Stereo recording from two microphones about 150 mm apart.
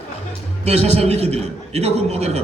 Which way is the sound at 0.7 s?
45° right (ahead or behind).